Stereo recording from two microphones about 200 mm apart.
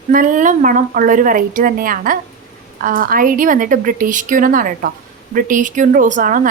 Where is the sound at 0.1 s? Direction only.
40° right (ahead or behind).